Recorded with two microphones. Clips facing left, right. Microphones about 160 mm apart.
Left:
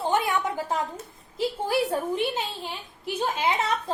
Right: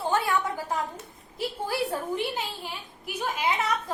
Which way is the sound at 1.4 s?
25° left (ahead or behind).